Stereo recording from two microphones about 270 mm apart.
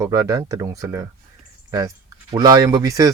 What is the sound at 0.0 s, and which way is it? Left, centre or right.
Speech, centre.